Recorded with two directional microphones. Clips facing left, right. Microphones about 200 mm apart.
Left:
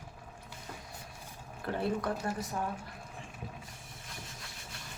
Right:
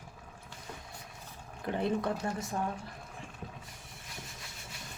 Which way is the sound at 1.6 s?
20° right (ahead or behind).